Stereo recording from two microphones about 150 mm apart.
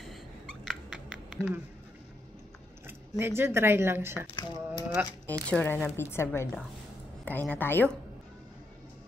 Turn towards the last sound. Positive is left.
turn(degrees=10)  # may be behind; listen again after turning